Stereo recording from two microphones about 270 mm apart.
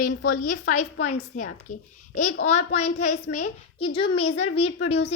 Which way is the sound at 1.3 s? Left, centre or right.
Left.